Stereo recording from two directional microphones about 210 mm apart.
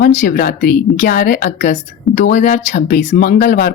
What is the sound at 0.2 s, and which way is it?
A woman's voice, 45° left (ahead or behind).